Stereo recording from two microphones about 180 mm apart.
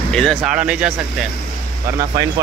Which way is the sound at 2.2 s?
20° right (ahead or behind).